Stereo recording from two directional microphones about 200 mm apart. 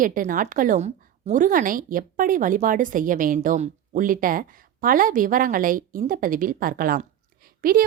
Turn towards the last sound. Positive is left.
turn(degrees=-45)  # may be behind; listen again after turning